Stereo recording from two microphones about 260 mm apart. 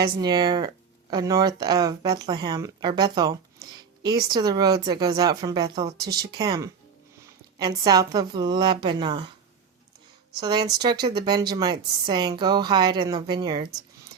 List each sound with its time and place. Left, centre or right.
0.0 s speech: centre
10.4 s speech: centre